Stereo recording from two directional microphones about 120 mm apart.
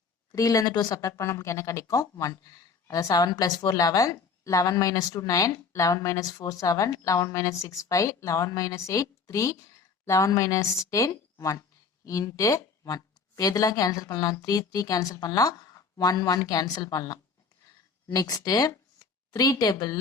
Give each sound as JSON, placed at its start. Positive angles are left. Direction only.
{"t": 0.3, "sound": "a woman's voice", "side_deg": 30}